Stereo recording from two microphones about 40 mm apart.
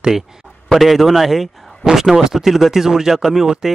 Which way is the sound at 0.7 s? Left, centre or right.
Centre.